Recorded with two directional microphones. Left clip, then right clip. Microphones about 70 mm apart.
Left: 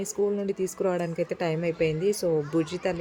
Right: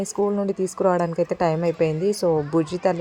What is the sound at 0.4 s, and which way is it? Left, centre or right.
Speech, right.